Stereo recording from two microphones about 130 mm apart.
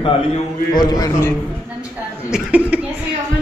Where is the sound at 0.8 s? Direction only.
30° left (ahead or behind).